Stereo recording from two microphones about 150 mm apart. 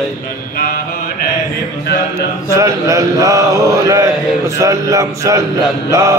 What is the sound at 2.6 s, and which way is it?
A man's voice, 20° right (ahead or behind).